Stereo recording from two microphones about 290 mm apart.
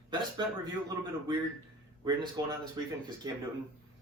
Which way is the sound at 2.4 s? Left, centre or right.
Centre.